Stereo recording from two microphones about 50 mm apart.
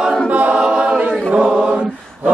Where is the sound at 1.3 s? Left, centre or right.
Right.